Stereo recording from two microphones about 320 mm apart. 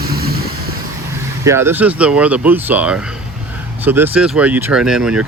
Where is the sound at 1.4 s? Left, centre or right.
Centre.